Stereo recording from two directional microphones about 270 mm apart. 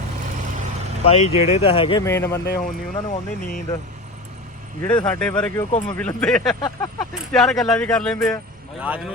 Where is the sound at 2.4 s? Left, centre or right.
Left.